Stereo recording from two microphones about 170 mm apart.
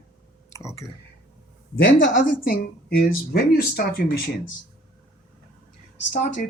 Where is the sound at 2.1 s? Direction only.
55° left (ahead or behind).